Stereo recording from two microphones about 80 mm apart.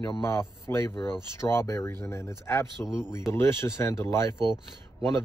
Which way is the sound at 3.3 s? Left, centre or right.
Left.